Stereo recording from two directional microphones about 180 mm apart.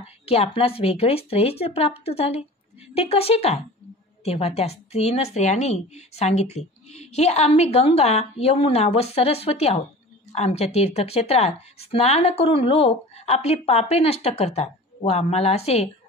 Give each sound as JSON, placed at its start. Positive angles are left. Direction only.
{"t": 0.0, "sound": "speech", "side_deg": 35}